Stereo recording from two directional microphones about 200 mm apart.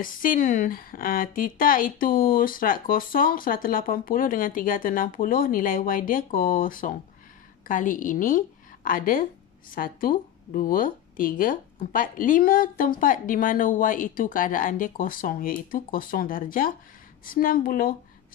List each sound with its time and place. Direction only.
0.0 s a woman's voice: 45° left (ahead or behind)